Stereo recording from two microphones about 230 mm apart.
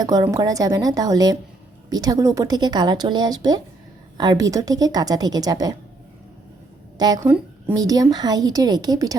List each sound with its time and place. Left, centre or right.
0.0 s speech: centre
7.0 s speech: centre